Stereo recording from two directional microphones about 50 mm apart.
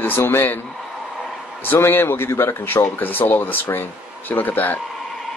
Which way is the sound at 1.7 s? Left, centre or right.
Left.